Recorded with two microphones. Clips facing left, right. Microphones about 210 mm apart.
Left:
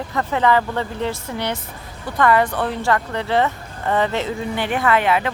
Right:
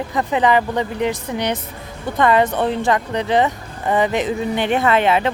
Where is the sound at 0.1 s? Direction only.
15° right (ahead or behind).